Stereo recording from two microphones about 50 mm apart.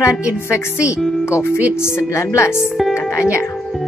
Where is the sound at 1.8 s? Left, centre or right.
Left.